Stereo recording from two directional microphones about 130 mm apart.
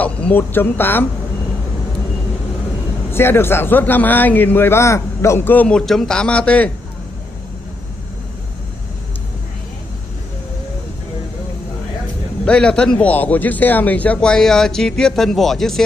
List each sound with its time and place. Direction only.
0.0 s a man's voice: 15° left (ahead or behind)
3.1 s a man's voice: 15° left (ahead or behind)
12.4 s a man's voice: 5° left (ahead or behind)